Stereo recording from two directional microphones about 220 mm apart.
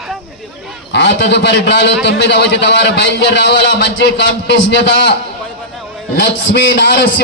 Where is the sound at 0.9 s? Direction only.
50° left (ahead or behind).